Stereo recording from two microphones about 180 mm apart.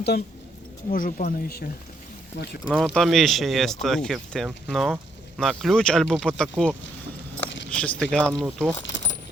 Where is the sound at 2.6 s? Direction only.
Centre (ahead or behind).